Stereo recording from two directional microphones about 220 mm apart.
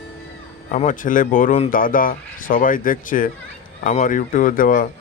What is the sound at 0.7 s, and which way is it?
Speech, 35° left (ahead or behind).